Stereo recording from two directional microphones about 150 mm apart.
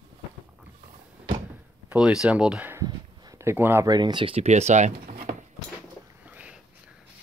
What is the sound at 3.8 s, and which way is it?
Speech, 30° right (ahead or behind).